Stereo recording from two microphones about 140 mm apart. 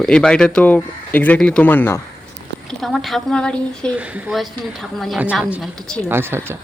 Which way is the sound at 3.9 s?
10° right (ahead or behind).